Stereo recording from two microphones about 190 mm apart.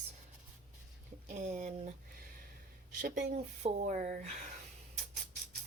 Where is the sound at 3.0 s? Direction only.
50° right (ahead or behind).